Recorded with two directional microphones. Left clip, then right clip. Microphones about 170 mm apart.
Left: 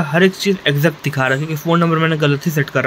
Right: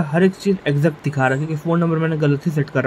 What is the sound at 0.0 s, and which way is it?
Speech, 10° right (ahead or behind).